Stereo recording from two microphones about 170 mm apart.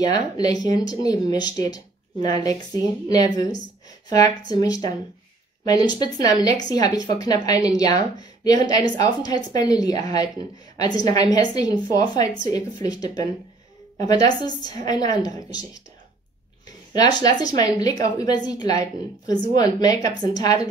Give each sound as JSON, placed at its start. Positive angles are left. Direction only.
{"t": 0.0, "sound": "a woman's voice", "side_deg": 25}
{"t": 4.5, "sound": "a woman's voice", "side_deg": 20}